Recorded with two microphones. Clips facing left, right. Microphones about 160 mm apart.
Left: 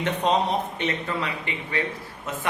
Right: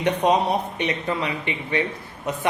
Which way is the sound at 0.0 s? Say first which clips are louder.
Right 3 dB; 10° right (ahead or behind).